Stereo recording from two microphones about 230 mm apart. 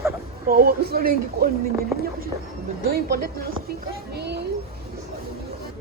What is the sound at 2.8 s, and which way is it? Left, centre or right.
Speech, right.